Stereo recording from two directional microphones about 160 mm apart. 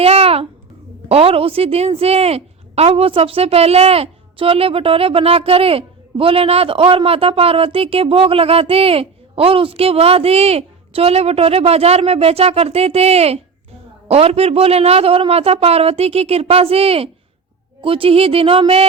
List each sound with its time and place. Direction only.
0.0 s babbling: 40° right (ahead or behind)
1.0 s a woman's voice: 40° right (ahead or behind)